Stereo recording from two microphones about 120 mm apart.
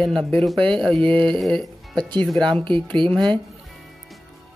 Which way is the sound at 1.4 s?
5° left (ahead or behind).